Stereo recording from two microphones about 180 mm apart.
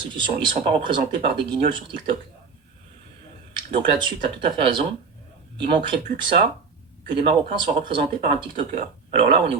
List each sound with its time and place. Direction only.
0.0 s speech: 25° right (ahead or behind)
3.5 s speech: 25° right (ahead or behind)